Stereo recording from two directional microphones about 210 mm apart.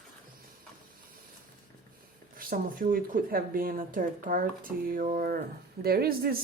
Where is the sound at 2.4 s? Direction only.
40° right (ahead or behind).